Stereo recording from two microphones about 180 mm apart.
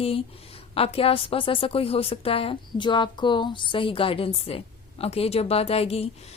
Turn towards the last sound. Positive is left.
turn(degrees=35)  # may be behind; listen again after turning